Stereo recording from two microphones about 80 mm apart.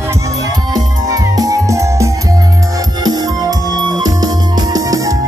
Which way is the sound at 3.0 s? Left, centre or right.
Right.